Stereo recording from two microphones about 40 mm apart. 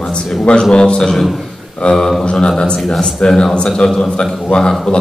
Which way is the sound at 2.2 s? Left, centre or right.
Left.